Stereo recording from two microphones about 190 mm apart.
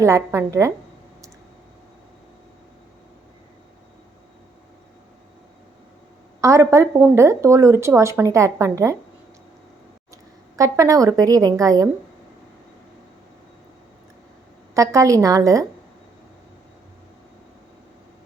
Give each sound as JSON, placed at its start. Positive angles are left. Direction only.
{"t": 0.0, "sound": "speech", "side_deg": -15}
{"t": 6.4, "sound": "speech", "side_deg": -15}
{"t": 10.6, "sound": "speech", "side_deg": -15}
{"t": 14.8, "sound": "speech", "side_deg": -15}